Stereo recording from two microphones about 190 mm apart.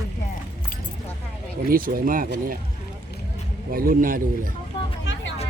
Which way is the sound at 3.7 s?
45° right (ahead or behind).